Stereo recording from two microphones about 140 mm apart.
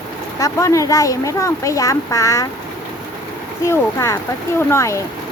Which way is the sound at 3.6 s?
20° left (ahead or behind).